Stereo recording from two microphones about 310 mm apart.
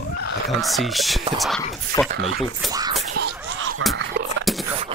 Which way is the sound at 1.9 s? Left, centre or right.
Centre.